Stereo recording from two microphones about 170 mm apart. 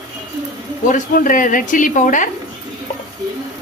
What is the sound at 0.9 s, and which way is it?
Speech, 50° left (ahead or behind).